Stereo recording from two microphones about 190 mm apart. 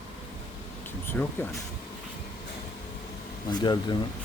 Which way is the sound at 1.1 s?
5° left (ahead or behind).